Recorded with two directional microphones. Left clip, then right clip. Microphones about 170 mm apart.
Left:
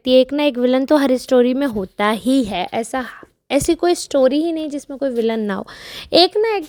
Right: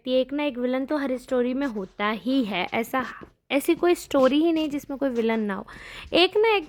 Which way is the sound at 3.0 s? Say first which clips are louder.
Left 6 dB; 25° left (ahead or behind).